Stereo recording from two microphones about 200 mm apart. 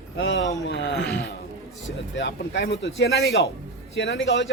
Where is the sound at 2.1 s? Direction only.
60° left (ahead or behind).